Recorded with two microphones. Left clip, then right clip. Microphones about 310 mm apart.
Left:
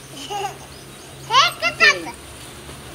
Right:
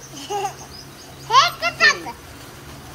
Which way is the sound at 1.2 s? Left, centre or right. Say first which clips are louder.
Right 1 dB; right.